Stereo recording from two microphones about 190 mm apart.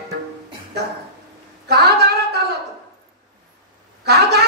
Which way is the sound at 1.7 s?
60° right (ahead or behind).